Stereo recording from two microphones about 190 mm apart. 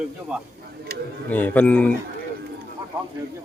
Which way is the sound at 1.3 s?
10° left (ahead or behind).